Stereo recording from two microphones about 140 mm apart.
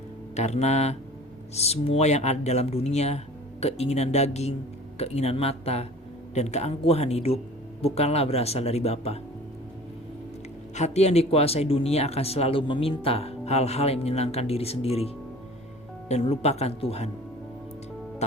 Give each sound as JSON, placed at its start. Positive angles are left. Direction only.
{"t": 0.3, "sound": "speech", "side_deg": 55}
{"t": 10.8, "sound": "speech", "side_deg": 50}
{"t": 18.2, "sound": "music", "side_deg": 50}